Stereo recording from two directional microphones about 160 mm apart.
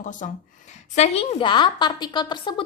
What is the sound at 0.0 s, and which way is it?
A woman's voice, 50° left (ahead or behind).